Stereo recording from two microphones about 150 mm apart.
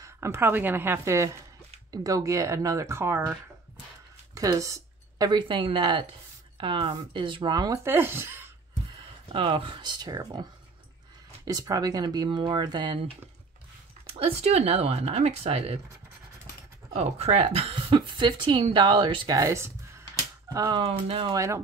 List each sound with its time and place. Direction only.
0.0 s a woman's voice: 15° right (ahead or behind)
4.4 s speech: 20° right (ahead or behind)
9.3 s speech: 35° right (ahead or behind)
11.4 s speech: 25° right (ahead or behind)
14.1 s speech: 45° right (ahead or behind)
16.9 s speech: 45° right (ahead or behind); by 20.8 s 25° right (ahead or behind)
20.8 s speech: 35° right (ahead or behind)